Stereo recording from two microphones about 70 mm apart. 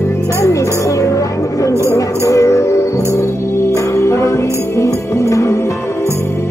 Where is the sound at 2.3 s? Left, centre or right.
Left.